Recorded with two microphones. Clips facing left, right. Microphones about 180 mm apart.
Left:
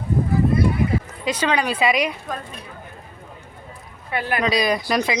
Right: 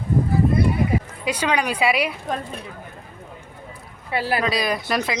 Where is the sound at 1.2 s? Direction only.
10° right (ahead or behind).